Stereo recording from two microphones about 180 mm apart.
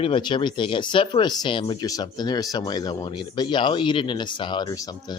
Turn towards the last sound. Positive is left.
turn(degrees=20)  # may be behind; listen again after turning